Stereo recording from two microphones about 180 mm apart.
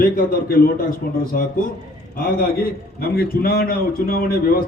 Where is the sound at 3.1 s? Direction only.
60° left (ahead or behind).